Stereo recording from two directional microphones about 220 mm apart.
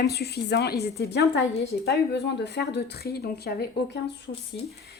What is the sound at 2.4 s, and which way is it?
A woman's voice, 50° left (ahead or behind).